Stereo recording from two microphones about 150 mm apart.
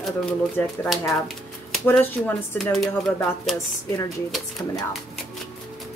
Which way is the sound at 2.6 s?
Centre (ahead or behind).